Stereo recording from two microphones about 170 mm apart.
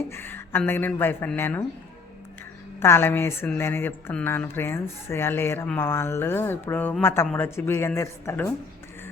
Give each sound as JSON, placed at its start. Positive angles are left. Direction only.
{"t": 0.1, "sound": "speech", "side_deg": 15}
{"t": 2.8, "sound": "speech", "side_deg": 15}